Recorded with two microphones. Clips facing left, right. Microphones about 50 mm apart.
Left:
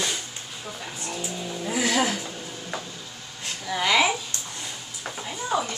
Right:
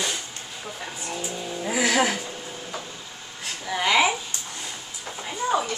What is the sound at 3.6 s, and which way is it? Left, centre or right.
A woman's voice, centre.